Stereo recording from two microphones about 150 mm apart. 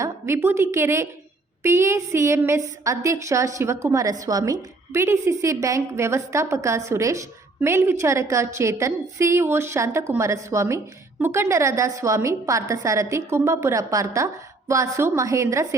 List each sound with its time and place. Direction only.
0.0 s a woman's voice: 15° right (ahead or behind)